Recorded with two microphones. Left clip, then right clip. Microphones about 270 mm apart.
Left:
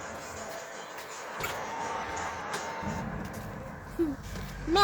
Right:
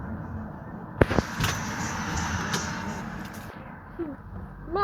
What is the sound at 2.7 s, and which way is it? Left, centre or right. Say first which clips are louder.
Vehicle: right 2 dB; left.